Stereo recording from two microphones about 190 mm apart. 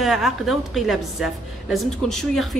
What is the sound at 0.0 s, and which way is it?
Speech, centre (ahead or behind).